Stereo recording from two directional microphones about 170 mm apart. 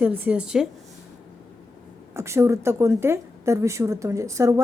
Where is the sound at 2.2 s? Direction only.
15° right (ahead or behind).